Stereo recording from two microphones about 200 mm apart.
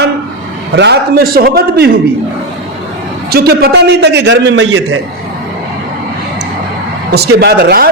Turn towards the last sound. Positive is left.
turn(degrees=-50)  # may be behind; listen again after turning